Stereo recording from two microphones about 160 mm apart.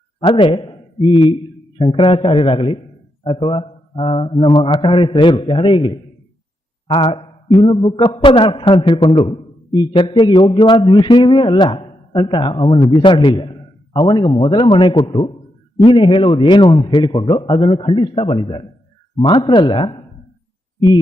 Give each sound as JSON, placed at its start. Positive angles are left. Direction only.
{"t": 0.2, "sound": "a man's voice", "side_deg": 30}